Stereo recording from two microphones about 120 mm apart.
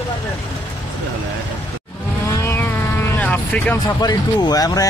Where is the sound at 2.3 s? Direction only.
20° left (ahead or behind).